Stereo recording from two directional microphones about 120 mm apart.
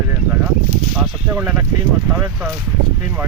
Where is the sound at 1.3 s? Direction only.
15° right (ahead or behind).